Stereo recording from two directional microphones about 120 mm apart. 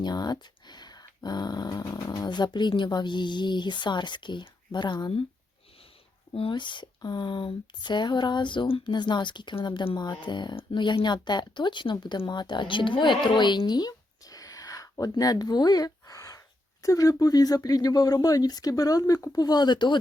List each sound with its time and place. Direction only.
0.0 s speech: 35° left (ahead or behind)
6.3 s speech: 45° left (ahead or behind)